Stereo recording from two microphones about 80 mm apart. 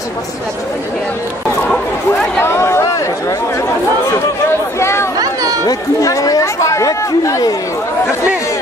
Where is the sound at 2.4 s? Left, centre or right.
Left.